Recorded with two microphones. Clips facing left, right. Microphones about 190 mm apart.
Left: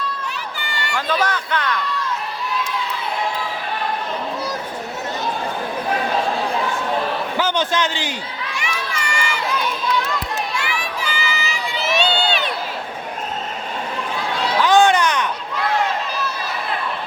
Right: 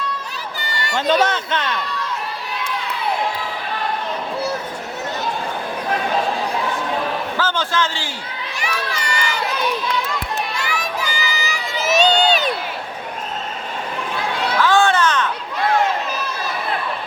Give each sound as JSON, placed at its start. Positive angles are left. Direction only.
{"t": 1.2, "sound": "a man's voice", "side_deg": -25}
{"t": 7.3, "sound": "a man's voice", "side_deg": 15}
{"t": 8.5, "sound": "crowd", "side_deg": -35}
{"t": 10.6, "sound": "crowd", "side_deg": -40}
{"t": 14.6, "sound": "children playing", "side_deg": 15}